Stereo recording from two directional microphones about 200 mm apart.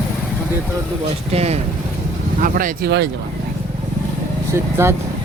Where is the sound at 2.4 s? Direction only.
40° right (ahead or behind).